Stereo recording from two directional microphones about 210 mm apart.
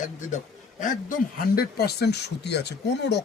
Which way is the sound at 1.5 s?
50° left (ahead or behind).